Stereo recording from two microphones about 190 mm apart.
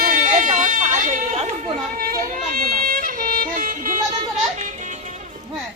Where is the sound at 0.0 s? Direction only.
45° right (ahead or behind).